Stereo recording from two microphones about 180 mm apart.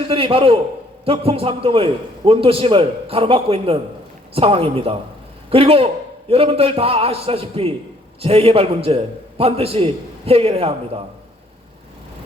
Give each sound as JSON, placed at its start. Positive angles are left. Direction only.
{"t": 0.1, "sound": "a man's voice", "side_deg": -30}